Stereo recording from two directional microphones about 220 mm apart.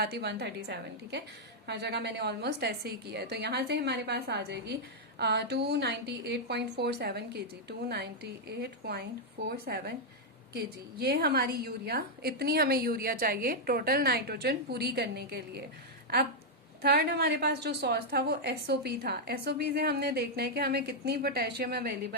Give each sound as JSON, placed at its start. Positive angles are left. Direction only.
{"t": 0.0, "sound": "a woman's voice", "side_deg": -45}
{"t": 11.0, "sound": "a woman's voice", "side_deg": -45}
{"t": 16.8, "sound": "a woman's voice", "side_deg": -50}